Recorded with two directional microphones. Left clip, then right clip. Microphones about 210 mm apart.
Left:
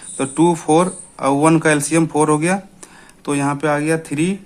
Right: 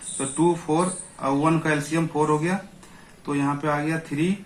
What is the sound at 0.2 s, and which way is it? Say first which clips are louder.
Speech: left 7 dB; 50° left (ahead or behind).